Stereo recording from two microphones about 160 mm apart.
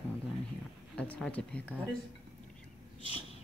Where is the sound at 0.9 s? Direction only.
10° left (ahead or behind).